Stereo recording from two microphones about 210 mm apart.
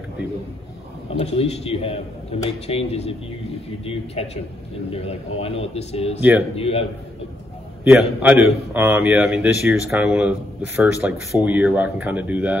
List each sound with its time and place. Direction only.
1.2 s a man's voice: 30° left (ahead or behind)
7.8 s speech: 5° right (ahead or behind)